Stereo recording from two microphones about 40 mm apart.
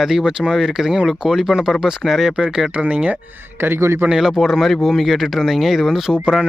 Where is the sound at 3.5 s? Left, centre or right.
Right.